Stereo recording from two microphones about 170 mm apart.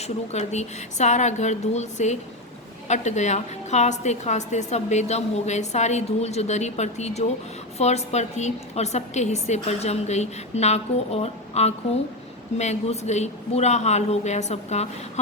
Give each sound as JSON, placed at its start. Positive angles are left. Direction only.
{"t": 0.0, "sound": "a woman's voice", "side_deg": 40}